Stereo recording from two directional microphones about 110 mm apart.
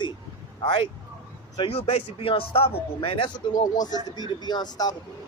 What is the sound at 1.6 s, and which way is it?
A man's voice, 60° left (ahead or behind).